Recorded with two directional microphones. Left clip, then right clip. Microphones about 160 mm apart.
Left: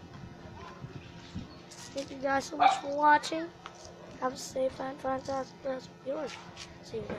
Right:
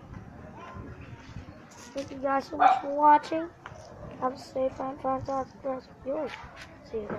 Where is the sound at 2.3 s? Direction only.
15° left (ahead or behind).